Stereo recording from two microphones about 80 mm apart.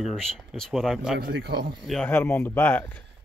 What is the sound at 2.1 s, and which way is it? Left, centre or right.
Speech, left.